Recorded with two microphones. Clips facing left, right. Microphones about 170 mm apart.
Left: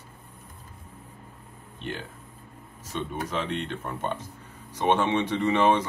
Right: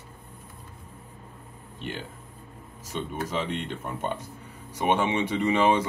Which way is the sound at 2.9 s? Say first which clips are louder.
Even; 15° right (ahead or behind).